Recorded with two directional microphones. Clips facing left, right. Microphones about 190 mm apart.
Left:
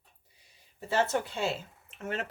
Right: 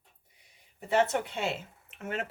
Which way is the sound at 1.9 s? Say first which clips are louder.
Even; 30° left (ahead or behind).